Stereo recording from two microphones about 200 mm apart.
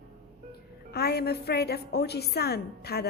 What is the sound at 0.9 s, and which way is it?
A woman's voice, 55° left (ahead or behind).